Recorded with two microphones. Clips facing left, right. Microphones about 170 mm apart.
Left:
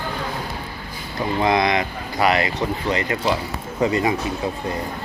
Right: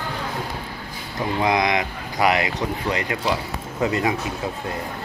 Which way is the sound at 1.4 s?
15° right (ahead or behind).